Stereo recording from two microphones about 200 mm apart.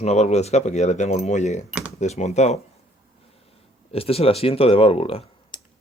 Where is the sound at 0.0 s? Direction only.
35° left (ahead or behind).